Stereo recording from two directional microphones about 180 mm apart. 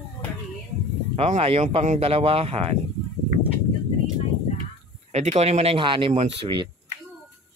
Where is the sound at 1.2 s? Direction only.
35° right (ahead or behind).